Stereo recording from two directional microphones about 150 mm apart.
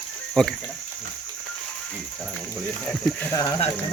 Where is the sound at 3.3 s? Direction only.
20° left (ahead or behind).